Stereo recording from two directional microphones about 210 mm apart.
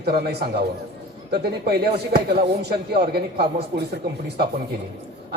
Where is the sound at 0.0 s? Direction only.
50° right (ahead or behind).